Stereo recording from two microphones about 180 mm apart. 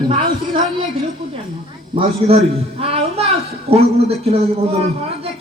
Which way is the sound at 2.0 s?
35° right (ahead or behind).